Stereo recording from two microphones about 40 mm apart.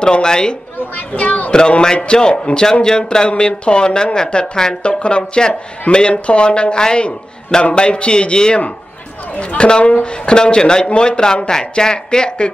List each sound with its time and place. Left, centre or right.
0.0 s speech: centre
1.1 s a child's voice: left
1.5 s speech: centre